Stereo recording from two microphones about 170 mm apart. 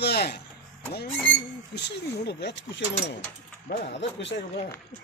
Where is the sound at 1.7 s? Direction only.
80° left.